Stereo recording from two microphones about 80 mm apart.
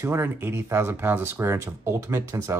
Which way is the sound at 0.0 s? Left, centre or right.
Right.